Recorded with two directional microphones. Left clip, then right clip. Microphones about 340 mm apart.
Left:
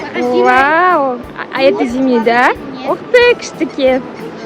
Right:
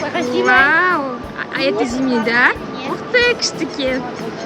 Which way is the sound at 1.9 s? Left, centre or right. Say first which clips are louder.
Left 5 dB; centre.